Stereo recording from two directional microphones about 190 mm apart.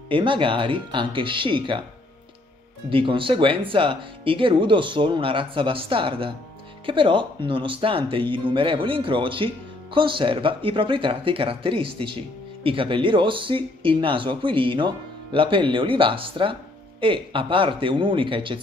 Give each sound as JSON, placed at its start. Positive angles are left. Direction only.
{"t": 0.1, "sound": "speech", "side_deg": -25}
{"t": 2.9, "sound": "speech", "side_deg": -25}